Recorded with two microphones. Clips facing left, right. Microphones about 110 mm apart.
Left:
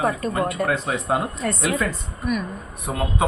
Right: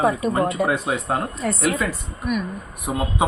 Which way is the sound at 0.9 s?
Centre (ahead or behind).